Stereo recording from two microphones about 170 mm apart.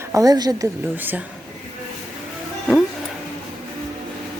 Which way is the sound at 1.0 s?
10° right (ahead or behind).